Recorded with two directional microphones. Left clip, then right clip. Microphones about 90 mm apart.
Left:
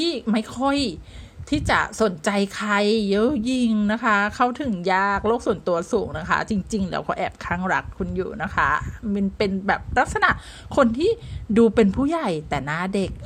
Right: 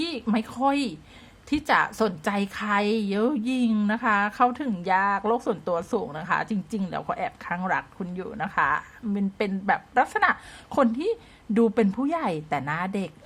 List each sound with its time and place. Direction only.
0.0 s a sound: 25° left (ahead or behind)
0.3 s a woman's voice: 30° left (ahead or behind)
2.3 s a woman's voice: 35° left (ahead or behind); by 7.6 s 50° left (ahead or behind)
7.9 s a woman's voice: 25° left (ahead or behind)